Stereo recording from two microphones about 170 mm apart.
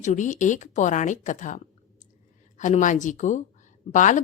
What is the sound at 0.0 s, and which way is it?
A woman's voice, 45° left (ahead or behind).